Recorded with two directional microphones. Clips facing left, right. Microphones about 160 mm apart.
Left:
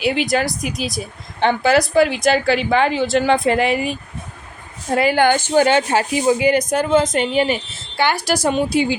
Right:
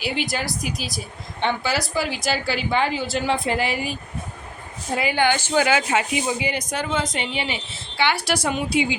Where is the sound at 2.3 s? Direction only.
80° left.